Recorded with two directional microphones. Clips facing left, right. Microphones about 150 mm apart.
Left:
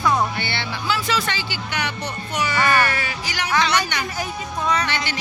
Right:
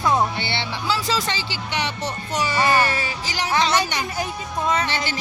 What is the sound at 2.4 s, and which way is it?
Speech, 30° right (ahead or behind).